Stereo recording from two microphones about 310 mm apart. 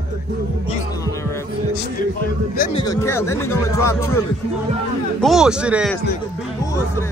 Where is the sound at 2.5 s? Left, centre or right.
Left.